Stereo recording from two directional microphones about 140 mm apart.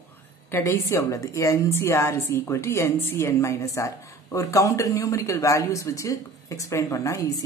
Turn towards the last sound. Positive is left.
turn(degrees=25)  # may be behind; listen again after turning